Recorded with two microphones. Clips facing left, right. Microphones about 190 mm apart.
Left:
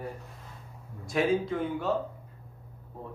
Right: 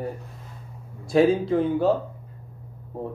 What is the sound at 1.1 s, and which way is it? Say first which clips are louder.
Speech: right 8 dB; 30° right (ahead or behind).